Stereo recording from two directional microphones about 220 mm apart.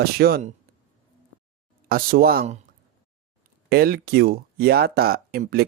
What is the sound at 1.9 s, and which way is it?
Speech, 40° right (ahead or behind).